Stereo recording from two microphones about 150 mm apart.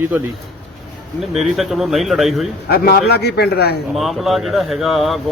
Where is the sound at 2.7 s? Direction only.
90° left.